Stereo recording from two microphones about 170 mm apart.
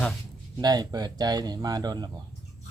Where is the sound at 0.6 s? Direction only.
25° right (ahead or behind).